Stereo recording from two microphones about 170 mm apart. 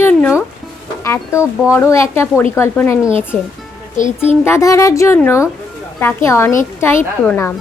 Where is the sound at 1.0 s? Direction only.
15° left (ahead or behind).